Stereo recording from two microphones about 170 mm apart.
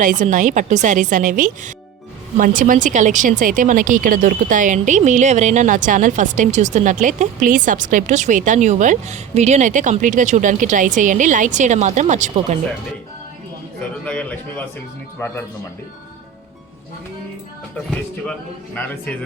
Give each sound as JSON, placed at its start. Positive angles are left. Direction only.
{"t": 0.0, "sound": "speech", "side_deg": -50}
{"t": 14.0, "sound": "a man's voice", "side_deg": 10}
{"t": 18.3, "sound": "a man's voice", "side_deg": 5}